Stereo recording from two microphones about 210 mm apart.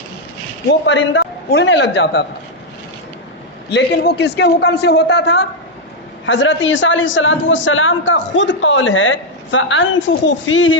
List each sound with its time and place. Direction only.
0.7 s a man's voice: 60° left (ahead or behind)
3.7 s a man's voice: 50° left (ahead or behind)